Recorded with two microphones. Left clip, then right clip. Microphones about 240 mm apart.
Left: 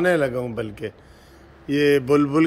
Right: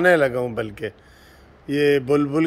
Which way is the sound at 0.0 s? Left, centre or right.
Centre.